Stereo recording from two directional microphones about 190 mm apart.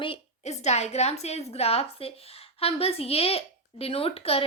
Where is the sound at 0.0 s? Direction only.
30° left (ahead or behind).